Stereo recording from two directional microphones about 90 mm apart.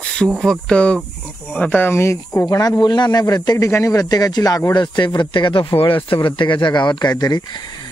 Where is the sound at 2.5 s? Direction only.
45° left (ahead or behind).